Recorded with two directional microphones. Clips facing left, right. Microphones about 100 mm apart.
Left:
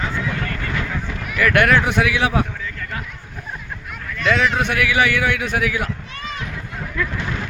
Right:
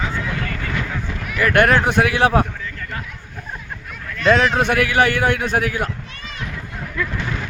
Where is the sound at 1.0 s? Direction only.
5° left (ahead or behind).